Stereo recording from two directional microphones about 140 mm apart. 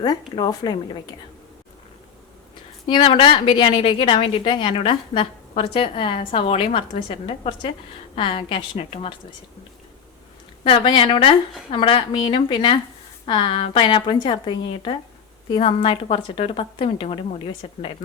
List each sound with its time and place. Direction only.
0.3 s speech: 30° left (ahead or behind)
2.8 s a woman's voice: 35° left (ahead or behind)
10.6 s a woman's voice: 35° left (ahead or behind)